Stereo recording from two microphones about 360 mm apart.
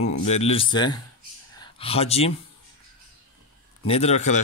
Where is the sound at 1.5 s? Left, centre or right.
Centre.